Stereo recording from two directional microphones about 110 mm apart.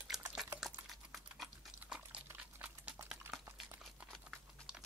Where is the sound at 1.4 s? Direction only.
10° right (ahead or behind).